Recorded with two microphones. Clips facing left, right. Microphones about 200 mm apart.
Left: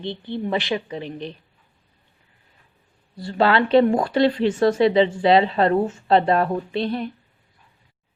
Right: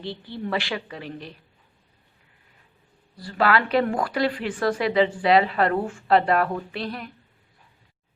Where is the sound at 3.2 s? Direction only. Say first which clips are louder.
Left 3 dB; 25° left (ahead or behind).